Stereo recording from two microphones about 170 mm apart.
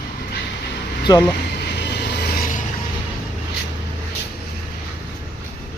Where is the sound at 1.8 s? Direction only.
75° left (ahead or behind); by 2.7 s 55° left (ahead or behind).